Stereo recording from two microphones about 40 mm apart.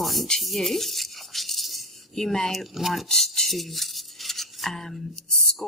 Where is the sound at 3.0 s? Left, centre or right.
Centre.